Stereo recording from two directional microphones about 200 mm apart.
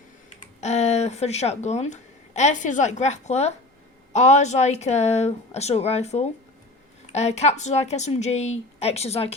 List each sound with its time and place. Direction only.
0.6 s a woman's voice: 35° left (ahead or behind)